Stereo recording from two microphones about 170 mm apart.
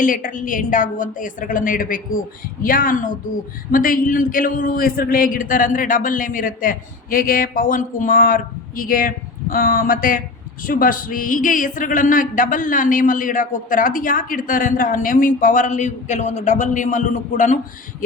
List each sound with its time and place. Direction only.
0.0 s a man's voice: 50° left (ahead or behind)